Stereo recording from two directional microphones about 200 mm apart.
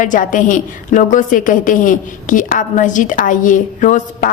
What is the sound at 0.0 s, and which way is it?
A woman's voice, 40° left (ahead or behind).